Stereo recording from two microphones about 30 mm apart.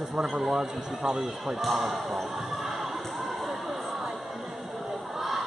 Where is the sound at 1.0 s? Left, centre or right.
Right.